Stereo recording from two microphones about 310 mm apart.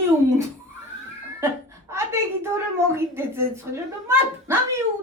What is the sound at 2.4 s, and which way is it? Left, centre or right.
A woman's voice, centre.